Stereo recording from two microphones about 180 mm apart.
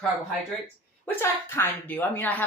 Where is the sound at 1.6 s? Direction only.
10° left (ahead or behind).